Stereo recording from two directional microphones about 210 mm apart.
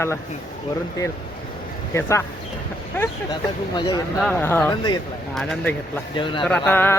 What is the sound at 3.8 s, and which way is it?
Speech, 20° left (ahead or behind).